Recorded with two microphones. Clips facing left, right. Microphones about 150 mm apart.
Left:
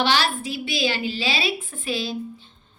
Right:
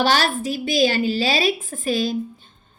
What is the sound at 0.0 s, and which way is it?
A woman's voice, 45° right (ahead or behind).